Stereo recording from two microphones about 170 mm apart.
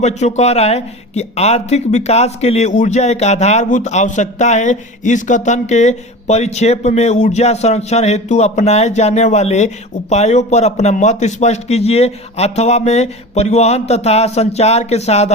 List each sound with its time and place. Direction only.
0.0 s speech: 40° left (ahead or behind)